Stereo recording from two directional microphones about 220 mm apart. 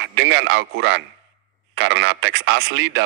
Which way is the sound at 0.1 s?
55° right (ahead or behind).